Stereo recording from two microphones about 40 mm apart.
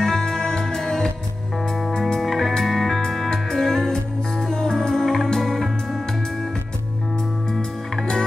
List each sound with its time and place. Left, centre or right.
0.0 s music: centre
2.0 s music: centre
2.2 s music: centre
7.9 s music: centre